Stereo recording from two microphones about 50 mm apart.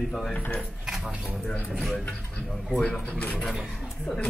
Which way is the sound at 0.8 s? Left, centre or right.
Centre.